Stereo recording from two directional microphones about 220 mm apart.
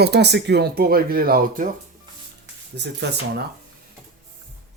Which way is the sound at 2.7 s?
50° right (ahead or behind).